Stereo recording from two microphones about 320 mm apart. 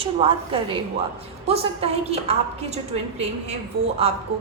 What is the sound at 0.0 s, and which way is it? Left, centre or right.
Speech, centre.